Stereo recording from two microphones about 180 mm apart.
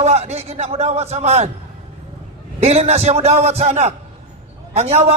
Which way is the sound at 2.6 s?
35° right (ahead or behind).